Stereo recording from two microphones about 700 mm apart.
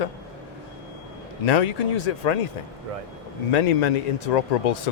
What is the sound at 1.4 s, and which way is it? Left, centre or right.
Speech, left.